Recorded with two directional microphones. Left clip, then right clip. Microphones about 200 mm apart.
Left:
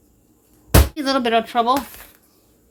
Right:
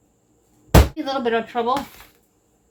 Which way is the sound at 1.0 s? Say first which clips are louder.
Left 4 dB; 60° left (ahead or behind).